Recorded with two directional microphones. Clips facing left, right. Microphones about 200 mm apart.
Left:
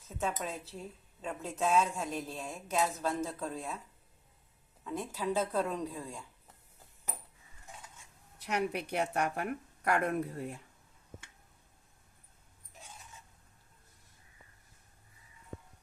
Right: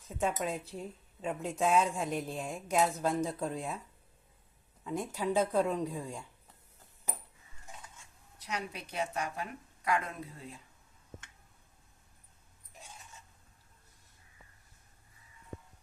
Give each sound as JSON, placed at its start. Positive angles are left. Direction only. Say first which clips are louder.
{"t": 0.2, "sound": "speech", "louder": "right 3 dB", "side_deg": -15}
{"t": 4.8, "sound": "speech", "louder": "right 2 dB", "side_deg": -15}
{"t": 8.4, "sound": "a woman's voice", "louder": "left 6 dB", "side_deg": 65}